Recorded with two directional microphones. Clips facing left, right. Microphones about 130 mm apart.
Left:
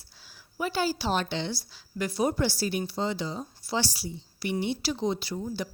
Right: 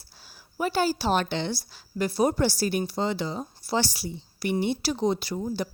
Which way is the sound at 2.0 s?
35° right (ahead or behind).